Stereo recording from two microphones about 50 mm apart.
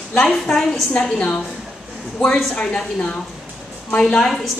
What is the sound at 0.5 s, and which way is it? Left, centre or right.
Speech, centre.